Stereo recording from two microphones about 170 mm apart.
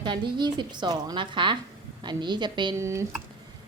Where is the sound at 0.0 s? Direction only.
25° right (ahead or behind).